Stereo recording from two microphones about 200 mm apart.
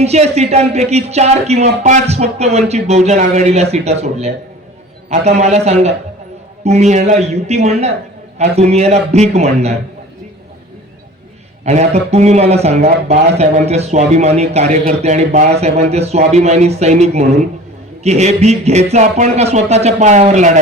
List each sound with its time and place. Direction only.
0.0 s a man's voice: 30° right (ahead or behind)
11.6 s a man's voice: 35° right (ahead or behind)